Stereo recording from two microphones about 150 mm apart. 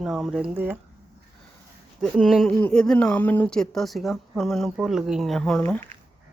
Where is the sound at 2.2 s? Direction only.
Centre (ahead or behind).